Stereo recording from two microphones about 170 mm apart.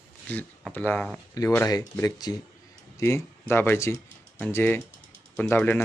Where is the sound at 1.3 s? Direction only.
20° left (ahead or behind).